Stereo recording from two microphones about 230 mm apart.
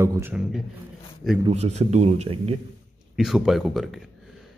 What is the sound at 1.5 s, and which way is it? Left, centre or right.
A man's voice, right.